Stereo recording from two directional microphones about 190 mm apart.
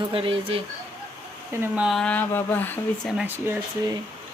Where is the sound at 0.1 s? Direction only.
30° right (ahead or behind).